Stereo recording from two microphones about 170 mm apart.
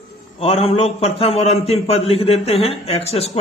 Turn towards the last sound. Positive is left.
turn(degrees=35)  # may be behind; listen again after turning